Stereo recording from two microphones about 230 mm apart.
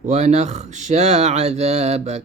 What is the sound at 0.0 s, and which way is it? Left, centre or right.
Mantra, right.